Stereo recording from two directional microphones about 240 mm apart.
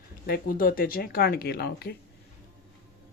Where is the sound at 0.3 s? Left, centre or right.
Left.